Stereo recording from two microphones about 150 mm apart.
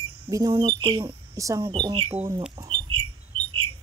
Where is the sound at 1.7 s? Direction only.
30° right (ahead or behind).